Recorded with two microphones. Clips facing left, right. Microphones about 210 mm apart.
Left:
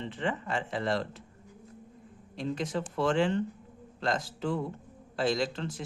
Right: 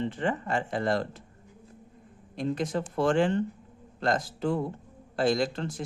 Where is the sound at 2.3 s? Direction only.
50° right (ahead or behind).